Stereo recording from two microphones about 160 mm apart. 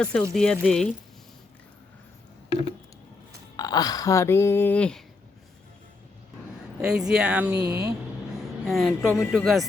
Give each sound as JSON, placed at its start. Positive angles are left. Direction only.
{"t": 0.0, "sound": "speech", "side_deg": 5}
{"t": 3.6, "sound": "speech", "side_deg": 25}
{"t": 6.8, "sound": "speech", "side_deg": -5}
{"t": 7.7, "sound": "speech", "side_deg": -85}
{"t": 8.6, "sound": "speech", "side_deg": 0}